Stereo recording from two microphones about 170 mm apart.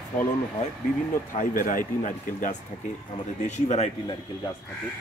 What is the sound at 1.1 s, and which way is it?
Speech, 55° left (ahead or behind).